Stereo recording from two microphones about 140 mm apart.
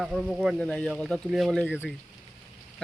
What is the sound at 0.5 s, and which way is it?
A man's voice, 5° left (ahead or behind).